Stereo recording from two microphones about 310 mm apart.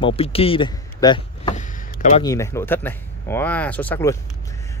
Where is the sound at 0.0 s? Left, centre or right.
Centre.